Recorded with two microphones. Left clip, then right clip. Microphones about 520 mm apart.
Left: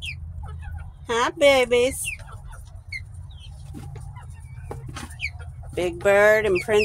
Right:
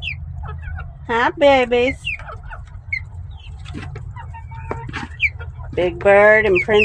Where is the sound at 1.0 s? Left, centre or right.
Left.